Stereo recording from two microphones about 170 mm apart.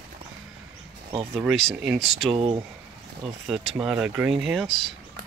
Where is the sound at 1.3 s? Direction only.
Centre (ahead or behind).